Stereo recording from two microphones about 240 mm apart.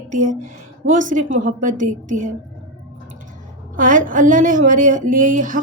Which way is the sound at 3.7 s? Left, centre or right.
Right.